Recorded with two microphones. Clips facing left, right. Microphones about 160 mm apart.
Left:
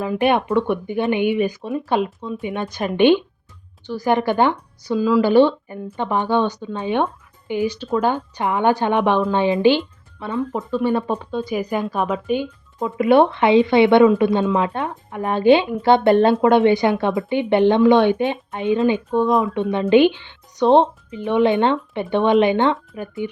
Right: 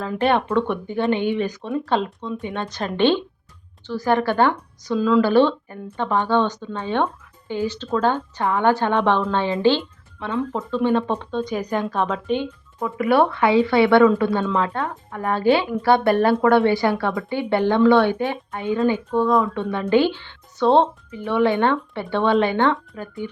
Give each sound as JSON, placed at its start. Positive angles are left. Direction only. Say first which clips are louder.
{"t": 0.0, "sound": "speech", "louder": "left 2 dB", "side_deg": 15}
{"t": 12.8, "sound": "speech", "louder": "left 3 dB", "side_deg": 20}